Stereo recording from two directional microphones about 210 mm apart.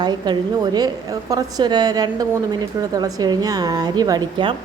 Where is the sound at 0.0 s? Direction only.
20° right (ahead or behind).